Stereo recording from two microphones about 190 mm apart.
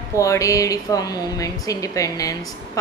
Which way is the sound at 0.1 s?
15° left (ahead or behind).